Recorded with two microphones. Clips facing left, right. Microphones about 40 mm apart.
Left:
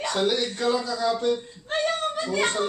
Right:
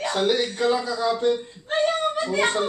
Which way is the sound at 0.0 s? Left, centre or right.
Centre.